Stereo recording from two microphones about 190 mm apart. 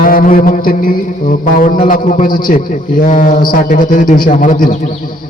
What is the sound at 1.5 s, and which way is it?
A man's voice, 45° left (ahead or behind).